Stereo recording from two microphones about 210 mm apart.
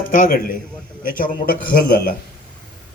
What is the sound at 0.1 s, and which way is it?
A man's voice, 40° left (ahead or behind).